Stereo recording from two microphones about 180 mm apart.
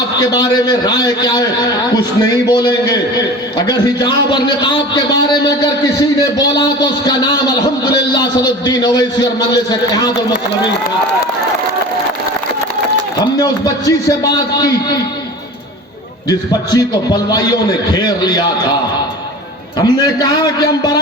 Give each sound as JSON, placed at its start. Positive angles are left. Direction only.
{"t": 0.2, "sound": "a man's voice", "side_deg": 25}
{"t": 13.1, "sound": "a man's voice", "side_deg": 20}
{"t": 16.3, "sound": "a man's voice", "side_deg": 20}
{"t": 19.8, "sound": "a man's voice", "side_deg": 20}